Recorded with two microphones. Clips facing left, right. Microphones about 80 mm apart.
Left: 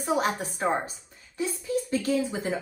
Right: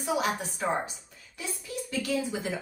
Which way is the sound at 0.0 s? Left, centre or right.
Left.